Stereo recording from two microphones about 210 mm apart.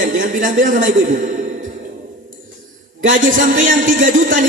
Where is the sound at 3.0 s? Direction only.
40° right (ahead or behind).